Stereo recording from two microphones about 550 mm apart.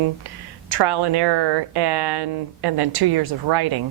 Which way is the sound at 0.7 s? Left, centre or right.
Right.